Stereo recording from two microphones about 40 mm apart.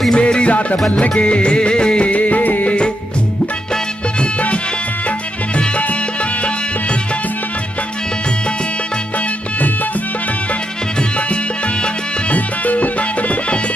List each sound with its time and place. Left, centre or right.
0.1 s music: left
12.3 s music: left